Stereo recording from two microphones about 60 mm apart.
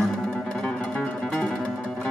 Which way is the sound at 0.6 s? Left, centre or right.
Centre.